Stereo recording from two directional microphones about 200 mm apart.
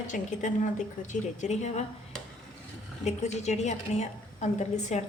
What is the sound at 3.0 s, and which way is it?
A woman's voice, 35° left (ahead or behind).